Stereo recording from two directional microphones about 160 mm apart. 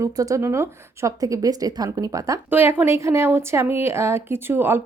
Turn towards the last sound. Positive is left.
turn(degrees=-15)  # may be behind; listen again after turning